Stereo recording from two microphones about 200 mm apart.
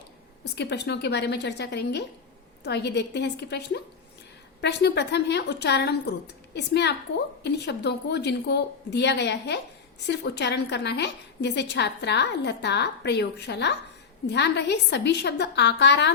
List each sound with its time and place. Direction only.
0.5 s a woman's voice: 55° left (ahead or behind)